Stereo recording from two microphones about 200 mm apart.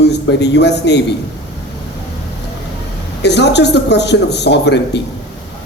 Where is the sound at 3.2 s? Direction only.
60° left (ahead or behind).